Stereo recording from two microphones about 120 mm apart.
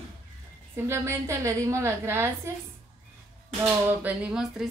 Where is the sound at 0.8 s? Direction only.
25° right (ahead or behind).